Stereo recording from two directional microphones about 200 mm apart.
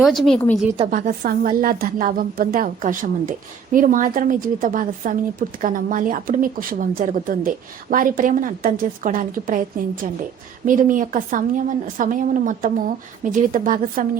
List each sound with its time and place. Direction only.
0.0 s a woman's voice: centre (ahead or behind)
0.9 s a woman's voice: 40° right (ahead or behind)